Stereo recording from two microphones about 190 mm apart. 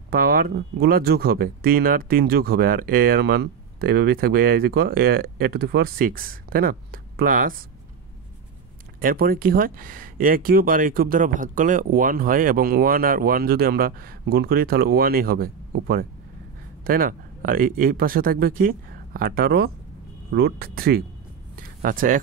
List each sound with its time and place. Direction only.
0.1 s speech: 50° right (ahead or behind)
9.0 s speech: 50° right (ahead or behind)
21.5 s a sound: 45° right (ahead or behind)